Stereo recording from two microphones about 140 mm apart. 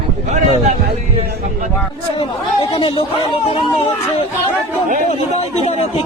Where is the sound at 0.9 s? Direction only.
90° right.